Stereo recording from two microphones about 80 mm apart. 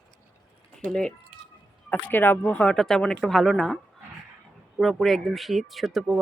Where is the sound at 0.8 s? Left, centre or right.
Centre.